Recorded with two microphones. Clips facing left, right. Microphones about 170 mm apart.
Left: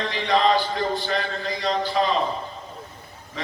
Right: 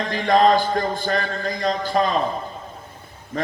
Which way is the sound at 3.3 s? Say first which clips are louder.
Right 8 dB; 50° right (ahead or behind).